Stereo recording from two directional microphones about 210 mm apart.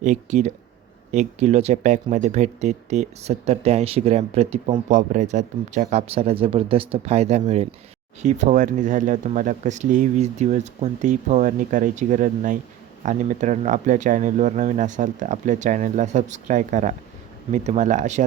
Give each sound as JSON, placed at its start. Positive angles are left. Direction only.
{"t": 0.0, "sound": "speech", "side_deg": -35}